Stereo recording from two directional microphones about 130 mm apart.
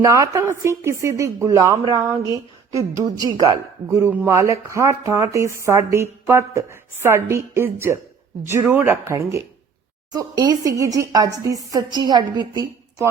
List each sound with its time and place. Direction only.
0.0 s speech: 25° right (ahead or behind)